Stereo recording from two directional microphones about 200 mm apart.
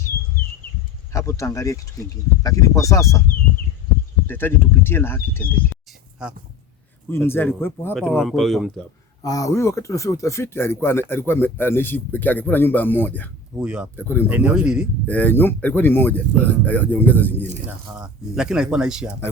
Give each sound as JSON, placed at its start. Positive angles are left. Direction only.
{"t": 1.1, "sound": "speech", "side_deg": 15}
{"t": 4.3, "sound": "speech", "side_deg": 10}
{"t": 6.2, "sound": "speech", "side_deg": -5}
{"t": 7.3, "sound": "speech", "side_deg": 10}
{"t": 9.2, "sound": "speech", "side_deg": 15}
{"t": 13.6, "sound": "speech", "side_deg": -5}
{"t": 13.9, "sound": "speech", "side_deg": 10}
{"t": 14.3, "sound": "speech", "side_deg": -5}
{"t": 15.0, "sound": "speech", "side_deg": 10}
{"t": 17.7, "sound": "speech", "side_deg": -5}